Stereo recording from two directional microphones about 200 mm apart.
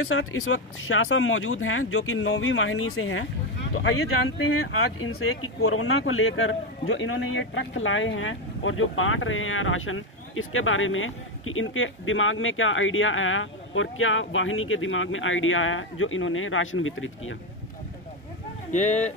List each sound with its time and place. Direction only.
0.1 s speech: 90° left
6.9 s speech: 70° left (ahead or behind); by 17.4 s 85° left
18.7 s speech: 35° left (ahead or behind)